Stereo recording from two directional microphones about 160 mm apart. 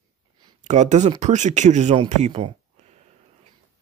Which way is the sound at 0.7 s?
45° right (ahead or behind).